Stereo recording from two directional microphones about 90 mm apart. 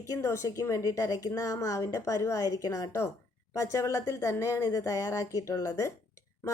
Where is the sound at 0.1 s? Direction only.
30° left (ahead or behind).